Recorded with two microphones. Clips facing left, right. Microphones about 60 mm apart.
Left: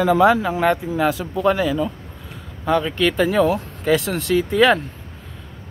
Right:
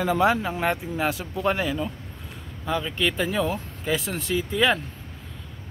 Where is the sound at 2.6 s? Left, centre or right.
Left.